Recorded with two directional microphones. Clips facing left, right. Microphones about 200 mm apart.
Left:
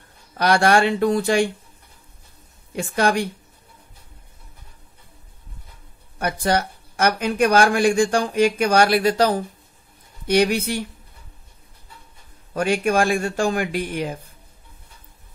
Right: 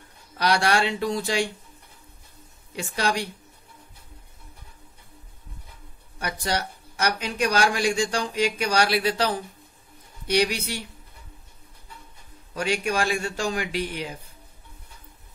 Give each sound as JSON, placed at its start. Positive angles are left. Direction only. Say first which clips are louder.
{"t": 0.4, "sound": "speech", "louder": "left 5 dB", "side_deg": 50}
{"t": 2.7, "sound": "speech", "louder": "left 6 dB", "side_deg": 50}
{"t": 6.1, "sound": "speech", "louder": "left 7 dB", "side_deg": 55}
{"t": 12.5, "sound": "speech", "louder": "left 6 dB", "side_deg": 50}